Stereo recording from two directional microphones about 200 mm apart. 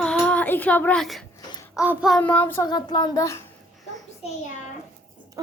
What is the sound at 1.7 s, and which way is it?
Child singing, 5° right (ahead or behind).